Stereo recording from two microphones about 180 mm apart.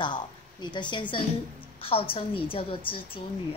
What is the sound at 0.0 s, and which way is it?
A woman's voice, 25° left (ahead or behind).